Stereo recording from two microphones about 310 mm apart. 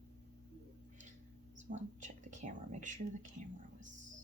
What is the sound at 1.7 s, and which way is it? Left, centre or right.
Speech, right.